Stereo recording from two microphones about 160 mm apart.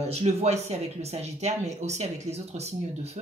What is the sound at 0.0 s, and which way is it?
Speech, 40° right (ahead or behind).